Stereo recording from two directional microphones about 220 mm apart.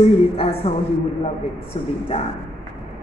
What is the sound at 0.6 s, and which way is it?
Speech, 25° left (ahead or behind).